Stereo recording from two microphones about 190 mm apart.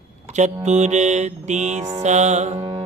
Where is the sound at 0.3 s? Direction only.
40° right (ahead or behind).